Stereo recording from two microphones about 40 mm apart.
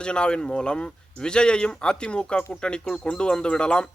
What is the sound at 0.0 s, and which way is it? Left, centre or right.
Speech, left.